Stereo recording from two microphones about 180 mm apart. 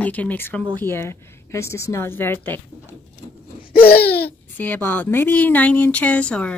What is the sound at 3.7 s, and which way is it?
Babbling, 60° left (ahead or behind).